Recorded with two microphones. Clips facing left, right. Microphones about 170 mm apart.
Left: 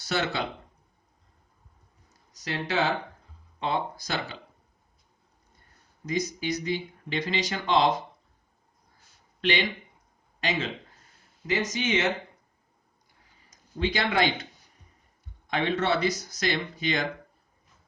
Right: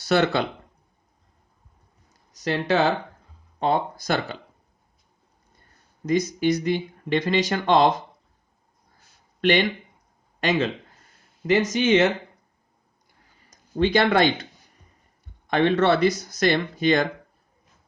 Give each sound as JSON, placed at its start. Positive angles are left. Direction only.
{"t": 0.1, "sound": "speech", "side_deg": -65}
{"t": 2.4, "sound": "speech", "side_deg": -60}
{"t": 3.6, "sound": "speech", "side_deg": -45}
{"t": 6.1, "sound": "speech", "side_deg": -60}
{"t": 9.4, "sound": "speech", "side_deg": -50}
{"t": 11.4, "sound": "speech", "side_deg": -65}
{"t": 13.7, "sound": "speech", "side_deg": -65}
{"t": 15.4, "sound": "speech", "side_deg": -65}